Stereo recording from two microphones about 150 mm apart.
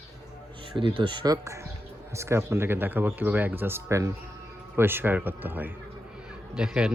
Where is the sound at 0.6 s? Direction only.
35° right (ahead or behind); by 5.7 s 15° right (ahead or behind).